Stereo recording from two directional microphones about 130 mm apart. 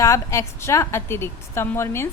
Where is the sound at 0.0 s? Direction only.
25° left (ahead or behind).